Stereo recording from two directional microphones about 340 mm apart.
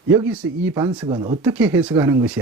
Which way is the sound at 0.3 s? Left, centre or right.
Centre.